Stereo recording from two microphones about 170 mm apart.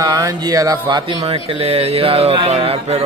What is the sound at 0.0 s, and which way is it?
Speech, 20° right (ahead or behind).